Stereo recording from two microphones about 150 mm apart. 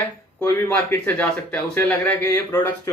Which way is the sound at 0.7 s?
10° left (ahead or behind).